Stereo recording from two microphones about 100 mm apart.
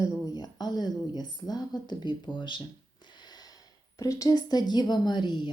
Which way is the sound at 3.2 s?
40° left (ahead or behind).